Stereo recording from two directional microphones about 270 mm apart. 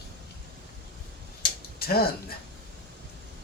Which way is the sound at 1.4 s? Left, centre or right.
Left.